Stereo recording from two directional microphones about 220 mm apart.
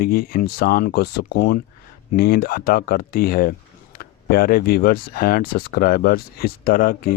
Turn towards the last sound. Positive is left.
turn(degrees=40)  # may be behind; listen again after turning